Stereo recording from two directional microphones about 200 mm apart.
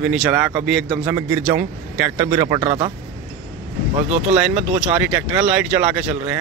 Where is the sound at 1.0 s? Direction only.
15° right (ahead or behind).